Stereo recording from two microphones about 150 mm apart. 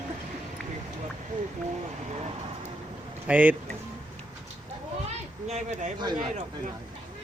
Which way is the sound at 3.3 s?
10° right (ahead or behind).